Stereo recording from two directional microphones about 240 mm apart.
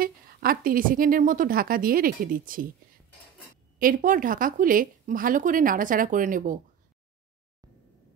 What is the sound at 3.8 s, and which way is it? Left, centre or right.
A woman's voice, right.